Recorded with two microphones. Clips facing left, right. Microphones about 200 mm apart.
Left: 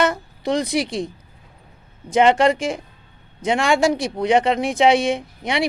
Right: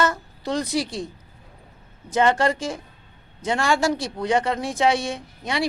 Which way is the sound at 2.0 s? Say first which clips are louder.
Left 5 dB; 15° left (ahead or behind).